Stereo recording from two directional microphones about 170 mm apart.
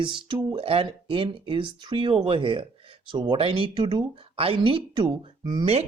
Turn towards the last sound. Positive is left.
turn(degrees=-30)  # may be behind; listen again after turning